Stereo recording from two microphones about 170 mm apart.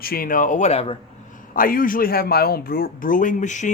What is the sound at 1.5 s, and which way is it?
Speech, 55° left (ahead or behind).